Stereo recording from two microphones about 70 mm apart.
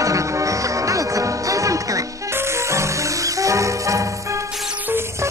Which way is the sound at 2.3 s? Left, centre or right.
Right.